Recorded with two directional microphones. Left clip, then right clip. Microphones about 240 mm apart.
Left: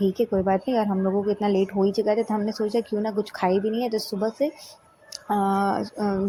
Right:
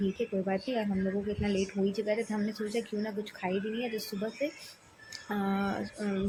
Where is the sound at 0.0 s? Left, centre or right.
Left.